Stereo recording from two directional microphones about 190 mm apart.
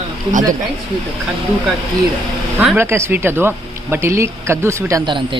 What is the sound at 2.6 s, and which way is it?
Speech, 10° right (ahead or behind).